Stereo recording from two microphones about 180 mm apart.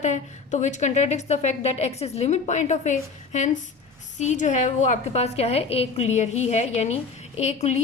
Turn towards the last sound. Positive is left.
turn(degrees=40)  # may be behind; listen again after turning